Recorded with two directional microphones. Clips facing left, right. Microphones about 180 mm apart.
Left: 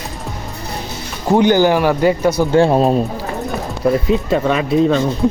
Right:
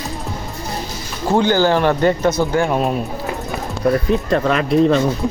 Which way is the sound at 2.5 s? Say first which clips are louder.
Left 5 dB; 30° left (ahead or behind).